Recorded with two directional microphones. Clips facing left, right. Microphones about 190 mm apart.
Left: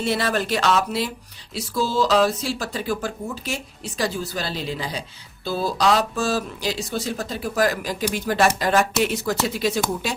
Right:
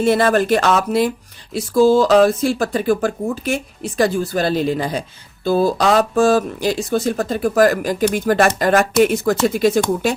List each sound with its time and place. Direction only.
0.0 s speech: 50° right (ahead or behind)